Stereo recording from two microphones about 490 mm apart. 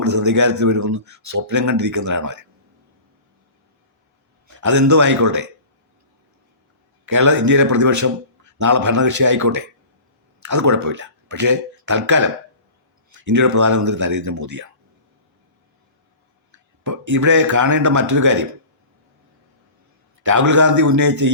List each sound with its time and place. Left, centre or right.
0.0 s speech: right
4.4 s a man's voice: right
7.0 s speech: right
16.5 s speech: right
20.2 s speech: right